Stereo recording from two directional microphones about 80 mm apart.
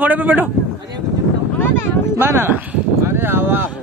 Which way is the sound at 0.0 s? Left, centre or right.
Right.